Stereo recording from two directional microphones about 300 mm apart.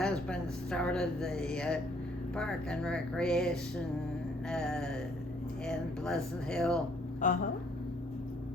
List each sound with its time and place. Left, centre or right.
0.0 s speech: centre
7.2 s speech: left